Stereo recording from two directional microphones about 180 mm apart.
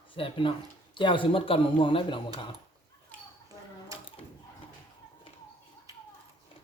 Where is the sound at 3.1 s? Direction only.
10° left (ahead or behind).